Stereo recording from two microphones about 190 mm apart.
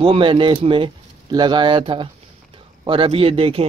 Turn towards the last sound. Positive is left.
turn(degrees=-30)  # may be behind; listen again after turning